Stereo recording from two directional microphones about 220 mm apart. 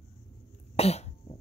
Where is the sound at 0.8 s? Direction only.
30° left (ahead or behind).